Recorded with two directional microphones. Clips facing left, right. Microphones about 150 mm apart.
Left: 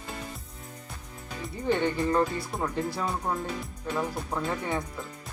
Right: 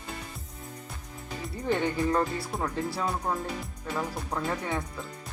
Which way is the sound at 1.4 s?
Centre (ahead or behind).